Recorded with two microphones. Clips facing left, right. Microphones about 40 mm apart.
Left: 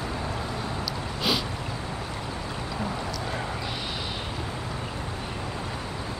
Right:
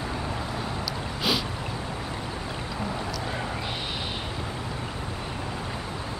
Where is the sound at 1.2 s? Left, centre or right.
Centre.